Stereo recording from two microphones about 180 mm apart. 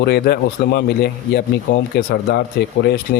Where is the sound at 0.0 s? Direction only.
65° left (ahead or behind).